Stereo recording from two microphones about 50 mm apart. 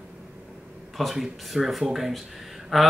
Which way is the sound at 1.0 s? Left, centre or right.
Centre.